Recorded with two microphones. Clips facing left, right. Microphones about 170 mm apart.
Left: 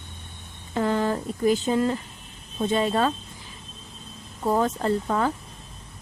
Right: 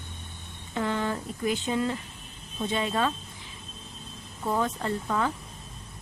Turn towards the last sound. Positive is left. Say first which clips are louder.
# left 5 dB
turn(degrees=40)  # may be behind; listen again after turning